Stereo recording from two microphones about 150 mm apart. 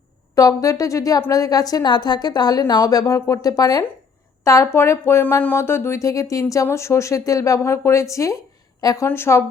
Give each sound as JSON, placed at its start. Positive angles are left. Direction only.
{"t": 0.3, "sound": "speech", "side_deg": 20}